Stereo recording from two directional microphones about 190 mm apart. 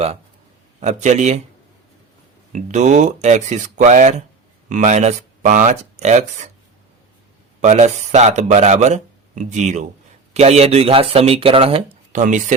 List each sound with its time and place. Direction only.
0.8 s speech: 40° right (ahead or behind)
2.5 s speech: 40° right (ahead or behind)
7.6 s speech: 40° right (ahead or behind)
12.1 s speech: 40° right (ahead or behind)